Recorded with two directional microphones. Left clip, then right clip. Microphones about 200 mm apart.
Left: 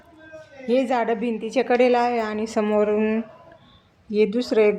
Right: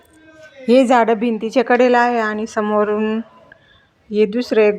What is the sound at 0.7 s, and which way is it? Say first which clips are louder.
A woman's voice: right 9 dB; 45° right (ahead or behind).